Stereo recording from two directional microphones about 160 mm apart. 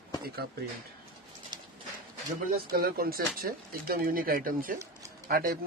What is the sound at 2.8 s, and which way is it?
A man's voice, 65° right (ahead or behind).